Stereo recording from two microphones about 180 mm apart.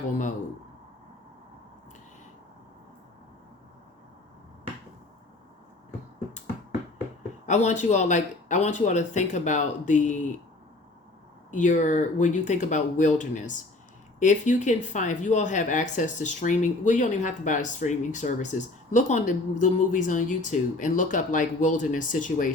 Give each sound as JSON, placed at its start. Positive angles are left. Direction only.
{"t": 7.4, "sound": "speech", "side_deg": 40}
{"t": 11.5, "sound": "speech", "side_deg": 45}